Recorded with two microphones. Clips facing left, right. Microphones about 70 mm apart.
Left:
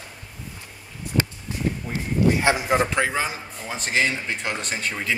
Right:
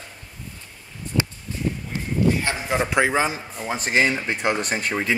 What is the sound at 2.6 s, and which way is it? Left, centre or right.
Speech, centre.